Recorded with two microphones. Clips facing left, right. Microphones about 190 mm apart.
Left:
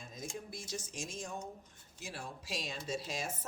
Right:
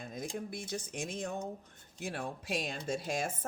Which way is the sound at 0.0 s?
60° right (ahead or behind).